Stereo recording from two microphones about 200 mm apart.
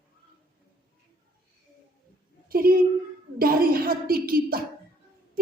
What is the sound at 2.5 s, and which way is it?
Speech, 45° right (ahead or behind).